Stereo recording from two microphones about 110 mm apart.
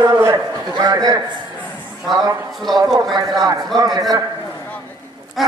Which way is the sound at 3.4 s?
35° right (ahead or behind).